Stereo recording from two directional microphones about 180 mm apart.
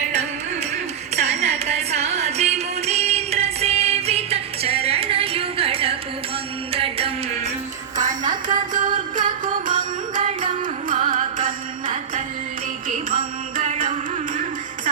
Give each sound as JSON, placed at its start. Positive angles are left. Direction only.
{"t": 1.1, "sound": "music", "side_deg": -40}
{"t": 8.3, "sound": "music", "side_deg": -45}